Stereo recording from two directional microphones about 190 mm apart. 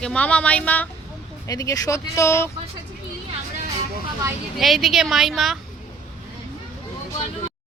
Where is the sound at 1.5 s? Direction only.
20° left (ahead or behind).